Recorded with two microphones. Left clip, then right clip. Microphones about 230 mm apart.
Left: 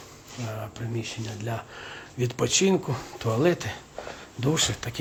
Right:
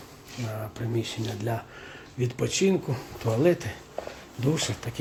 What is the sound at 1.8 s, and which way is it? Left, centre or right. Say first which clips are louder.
Speech: left 2 dB; centre.